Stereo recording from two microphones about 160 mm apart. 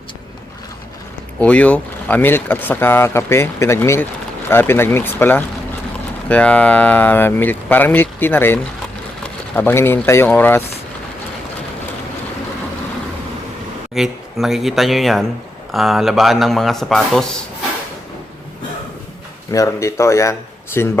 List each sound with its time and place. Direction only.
1.4 s speech: 10° left (ahead or behind)
13.9 s a man's voice: centre (ahead or behind)
19.5 s speech: 20° left (ahead or behind)